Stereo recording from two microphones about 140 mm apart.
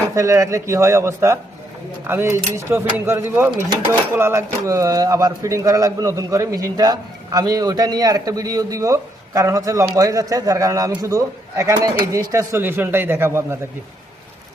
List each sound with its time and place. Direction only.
0.1 s speech: 20° right (ahead or behind)